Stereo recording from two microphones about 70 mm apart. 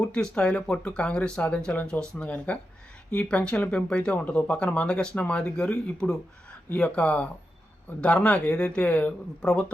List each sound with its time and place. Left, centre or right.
0.0 s speech: centre